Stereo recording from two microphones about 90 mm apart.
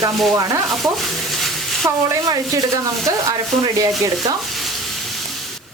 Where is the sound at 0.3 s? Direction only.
40° right (ahead or behind).